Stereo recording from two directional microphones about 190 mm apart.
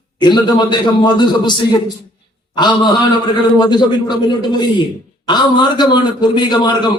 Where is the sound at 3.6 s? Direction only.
25° left (ahead or behind).